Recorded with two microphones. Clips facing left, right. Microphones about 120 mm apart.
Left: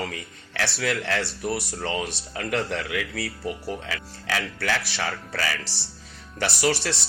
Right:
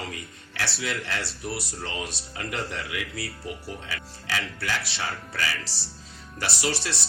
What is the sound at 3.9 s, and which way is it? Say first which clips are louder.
Speech: left 3 dB; 90° left.